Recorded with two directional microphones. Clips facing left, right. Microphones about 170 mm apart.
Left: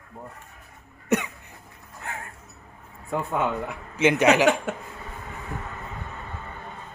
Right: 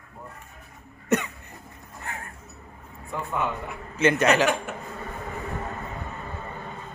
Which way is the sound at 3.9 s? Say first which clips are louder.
Left 2 dB; 15° left (ahead or behind).